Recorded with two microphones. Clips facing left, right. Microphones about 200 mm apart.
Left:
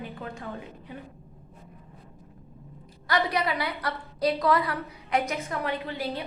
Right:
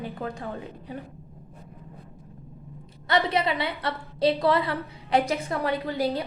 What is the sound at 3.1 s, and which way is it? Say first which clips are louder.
A woman's voice: right 2 dB; 25° right (ahead or behind).